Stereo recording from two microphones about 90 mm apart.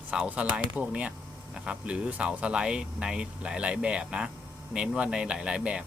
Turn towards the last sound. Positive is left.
turn(degrees=-10)  # may be behind; listen again after turning